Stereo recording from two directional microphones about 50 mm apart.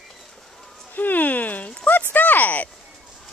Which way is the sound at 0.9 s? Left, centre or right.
Left.